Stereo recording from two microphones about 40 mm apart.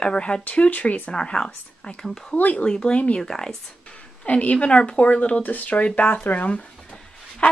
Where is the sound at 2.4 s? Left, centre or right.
Left.